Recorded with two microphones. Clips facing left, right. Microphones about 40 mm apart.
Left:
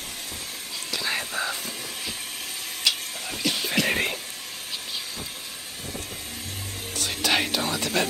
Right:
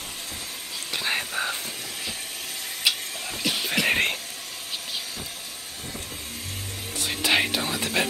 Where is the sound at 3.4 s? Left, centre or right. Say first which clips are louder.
Even; centre.